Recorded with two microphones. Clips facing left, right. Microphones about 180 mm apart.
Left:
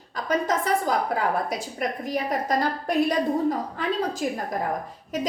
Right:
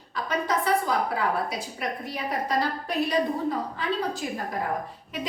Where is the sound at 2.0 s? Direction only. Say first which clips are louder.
Left 5 dB; 45° left (ahead or behind).